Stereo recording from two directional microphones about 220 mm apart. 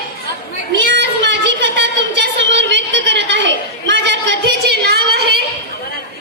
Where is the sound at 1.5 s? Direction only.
55° right (ahead or behind).